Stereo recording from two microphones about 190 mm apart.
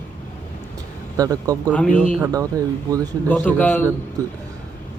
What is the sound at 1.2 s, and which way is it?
Speech, 20° right (ahead or behind).